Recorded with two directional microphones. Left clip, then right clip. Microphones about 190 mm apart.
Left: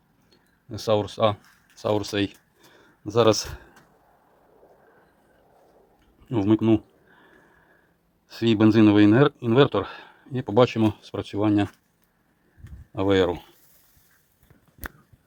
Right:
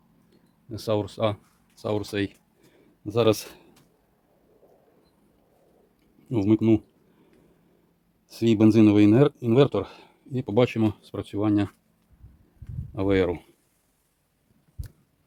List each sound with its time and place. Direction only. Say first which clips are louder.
0.7 s speech: left 4 dB; 10° right (ahead or behind)
6.2 s speech: left 1 dB; 20° right (ahead or behind)
8.3 s speech: even; 20° right (ahead or behind)
12.9 s speech: left 2 dB; 15° right (ahead or behind)